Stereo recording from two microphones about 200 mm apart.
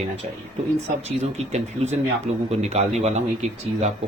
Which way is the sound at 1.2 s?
30° right (ahead or behind).